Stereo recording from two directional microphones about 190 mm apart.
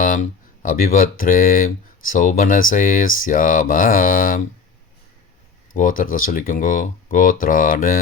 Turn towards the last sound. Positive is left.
turn(degrees=45)  # may be behind; listen again after turning